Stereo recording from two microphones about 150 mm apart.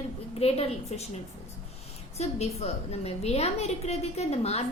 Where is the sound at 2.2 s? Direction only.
45° left (ahead or behind).